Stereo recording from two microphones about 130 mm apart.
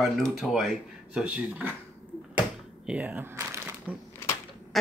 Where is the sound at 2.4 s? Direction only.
10° right (ahead or behind).